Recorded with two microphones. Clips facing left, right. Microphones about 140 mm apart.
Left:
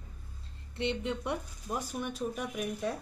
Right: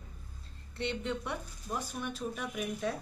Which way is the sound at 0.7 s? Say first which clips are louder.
Left 2 dB; 20° left (ahead or behind).